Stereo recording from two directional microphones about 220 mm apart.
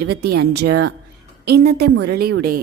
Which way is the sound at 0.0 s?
45° right (ahead or behind).